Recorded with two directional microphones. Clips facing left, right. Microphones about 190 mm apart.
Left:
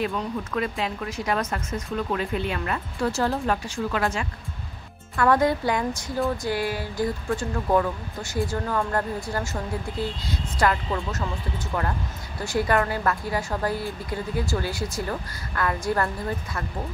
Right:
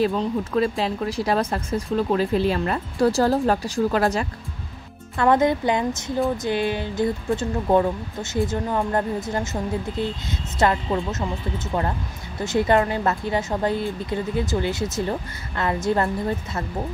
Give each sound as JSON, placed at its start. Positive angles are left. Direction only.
{"t": 0.0, "sound": "speech", "side_deg": -30}
{"t": 5.1, "sound": "speech", "side_deg": -20}